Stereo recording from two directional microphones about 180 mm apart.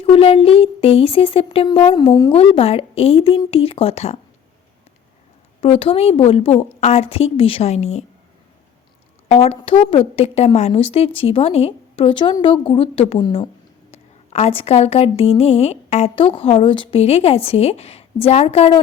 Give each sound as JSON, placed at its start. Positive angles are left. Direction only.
{"t": 0.0, "sound": "a woman's voice", "side_deg": 35}
{"t": 2.3, "sound": "a woman's voice", "side_deg": 30}
{"t": 5.5, "sound": "a woman's voice", "side_deg": 30}
{"t": 9.3, "sound": "a woman's voice", "side_deg": 35}
{"t": 13.9, "sound": "a woman's voice", "side_deg": 35}